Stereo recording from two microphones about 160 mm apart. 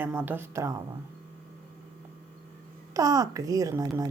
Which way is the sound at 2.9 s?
20° right (ahead or behind).